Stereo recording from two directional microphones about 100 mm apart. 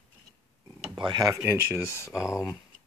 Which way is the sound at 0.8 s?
5° right (ahead or behind).